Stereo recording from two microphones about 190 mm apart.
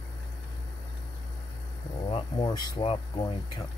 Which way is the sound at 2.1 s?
25° left (ahead or behind).